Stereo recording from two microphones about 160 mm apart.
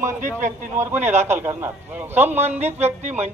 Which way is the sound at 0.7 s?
15° right (ahead or behind).